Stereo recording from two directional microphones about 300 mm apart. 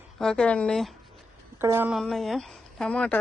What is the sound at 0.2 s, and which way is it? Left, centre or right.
Speech, centre.